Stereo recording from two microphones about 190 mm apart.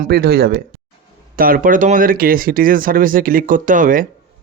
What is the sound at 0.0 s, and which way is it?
A man's voice, 55° right (ahead or behind).